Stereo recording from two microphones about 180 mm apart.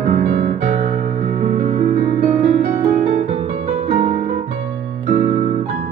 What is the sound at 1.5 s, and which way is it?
Music, 50° right (ahead or behind).